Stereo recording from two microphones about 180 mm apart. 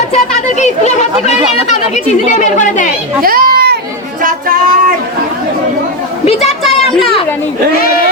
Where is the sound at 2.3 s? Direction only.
45° left (ahead or behind).